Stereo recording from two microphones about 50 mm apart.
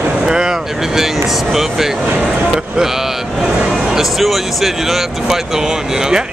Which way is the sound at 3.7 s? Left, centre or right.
Centre.